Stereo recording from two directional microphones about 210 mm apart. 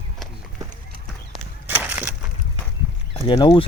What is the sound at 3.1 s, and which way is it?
Speech, 20° left (ahead or behind).